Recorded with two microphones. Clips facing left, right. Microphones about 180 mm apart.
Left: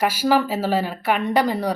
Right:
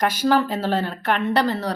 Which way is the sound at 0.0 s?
10° left (ahead or behind).